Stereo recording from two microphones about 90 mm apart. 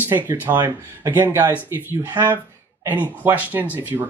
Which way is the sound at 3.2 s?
20° right (ahead or behind).